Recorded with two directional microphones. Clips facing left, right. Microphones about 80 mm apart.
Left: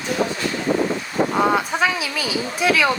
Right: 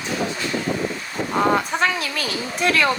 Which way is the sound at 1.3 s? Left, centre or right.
Centre.